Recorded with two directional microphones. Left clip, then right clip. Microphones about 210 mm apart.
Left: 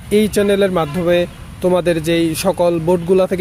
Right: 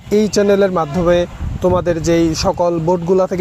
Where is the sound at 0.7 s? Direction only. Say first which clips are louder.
Right 1 dB; 5° left (ahead or behind).